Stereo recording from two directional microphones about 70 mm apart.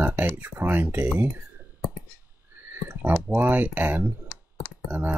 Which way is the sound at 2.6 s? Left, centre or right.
Right.